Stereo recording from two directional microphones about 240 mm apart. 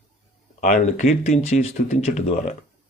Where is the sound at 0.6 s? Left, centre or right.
Left.